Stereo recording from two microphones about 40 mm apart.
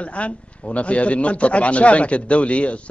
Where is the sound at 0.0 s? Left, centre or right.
Left.